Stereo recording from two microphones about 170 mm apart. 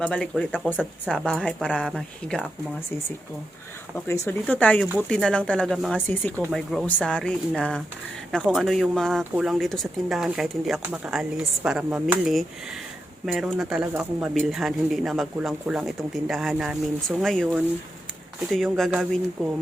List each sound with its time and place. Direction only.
0.0 s speech: 5° left (ahead or behind)
3.9 s speech: 15° left (ahead or behind); by 19.5 s 5° right (ahead or behind)